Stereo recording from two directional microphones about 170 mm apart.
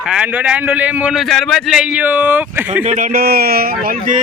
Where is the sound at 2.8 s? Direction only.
50° right (ahead or behind).